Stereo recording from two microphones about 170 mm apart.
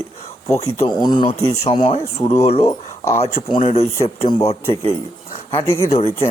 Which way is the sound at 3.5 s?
35° left (ahead or behind).